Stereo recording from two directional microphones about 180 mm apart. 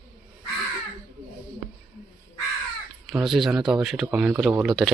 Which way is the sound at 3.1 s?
Centre (ahead or behind).